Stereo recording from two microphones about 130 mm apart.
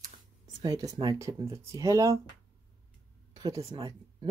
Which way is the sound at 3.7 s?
30° right (ahead or behind).